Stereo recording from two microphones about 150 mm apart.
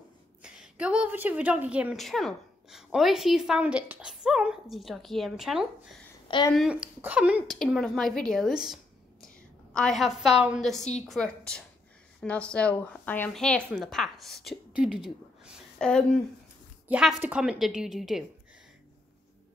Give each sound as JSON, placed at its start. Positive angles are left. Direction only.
{"t": 0.4, "sound": "a woman's voice", "side_deg": -5}
{"t": 6.2, "sound": "a woman's voice", "side_deg": 30}
{"t": 6.5, "sound": "speech", "side_deg": -5}
{"t": 7.5, "sound": "speech", "side_deg": 5}
{"t": 9.8, "sound": "a woman's voice", "side_deg": 0}
{"t": 16.8, "sound": "a woman's voice", "side_deg": -5}